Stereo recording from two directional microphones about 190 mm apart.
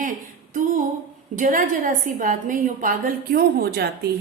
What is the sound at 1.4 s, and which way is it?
A woman's voice, 45° right (ahead or behind).